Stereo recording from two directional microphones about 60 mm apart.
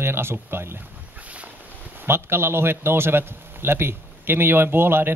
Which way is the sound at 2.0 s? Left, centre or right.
Right.